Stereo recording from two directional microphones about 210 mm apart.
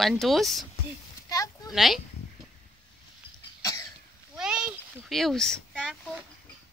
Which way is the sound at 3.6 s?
15° left (ahead or behind).